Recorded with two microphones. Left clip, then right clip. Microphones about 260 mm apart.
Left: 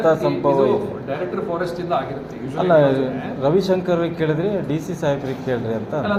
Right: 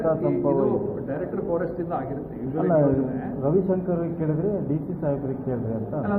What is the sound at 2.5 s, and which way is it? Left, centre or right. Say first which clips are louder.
A man's voice: left 6 dB; left.